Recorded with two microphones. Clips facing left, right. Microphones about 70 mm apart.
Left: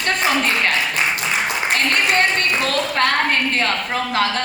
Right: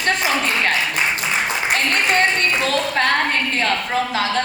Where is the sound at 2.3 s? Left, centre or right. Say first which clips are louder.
Even; left.